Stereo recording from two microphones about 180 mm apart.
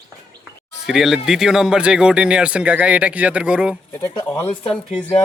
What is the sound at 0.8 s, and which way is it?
Speech, centre (ahead or behind).